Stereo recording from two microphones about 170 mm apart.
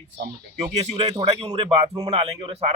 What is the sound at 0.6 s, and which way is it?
Speech, 40° right (ahead or behind).